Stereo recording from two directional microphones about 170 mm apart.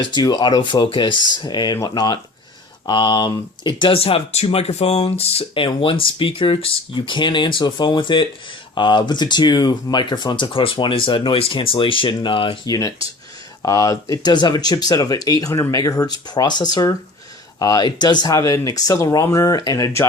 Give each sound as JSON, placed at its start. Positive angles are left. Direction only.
{"t": 0.0, "sound": "speech", "side_deg": 25}